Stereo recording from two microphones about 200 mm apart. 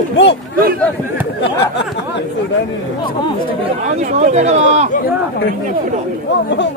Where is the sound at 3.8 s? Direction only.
35° right (ahead or behind).